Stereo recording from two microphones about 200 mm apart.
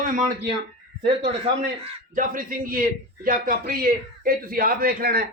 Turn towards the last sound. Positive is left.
turn(degrees=-50)  # may be behind; listen again after turning